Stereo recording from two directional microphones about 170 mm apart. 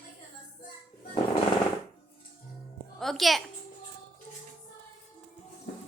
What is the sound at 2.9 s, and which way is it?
Speech, centre (ahead or behind).